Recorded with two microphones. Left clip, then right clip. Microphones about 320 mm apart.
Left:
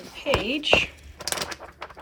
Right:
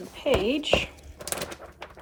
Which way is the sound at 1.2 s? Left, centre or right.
Centre.